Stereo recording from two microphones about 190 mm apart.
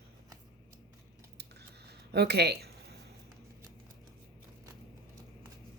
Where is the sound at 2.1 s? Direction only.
60° right (ahead or behind).